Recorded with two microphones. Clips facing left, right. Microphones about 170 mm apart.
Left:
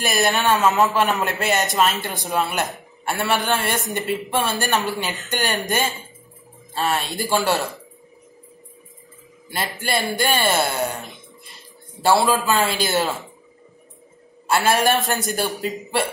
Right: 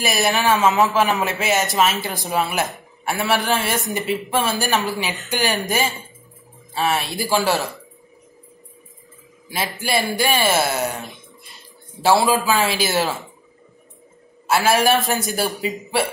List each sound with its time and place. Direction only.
0.0 s a man's voice: centre (ahead or behind)
9.5 s speech: 5° right (ahead or behind)
14.5 s a man's voice: centre (ahead or behind)